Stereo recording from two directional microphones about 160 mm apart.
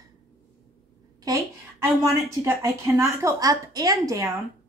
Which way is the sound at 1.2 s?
20° right (ahead or behind).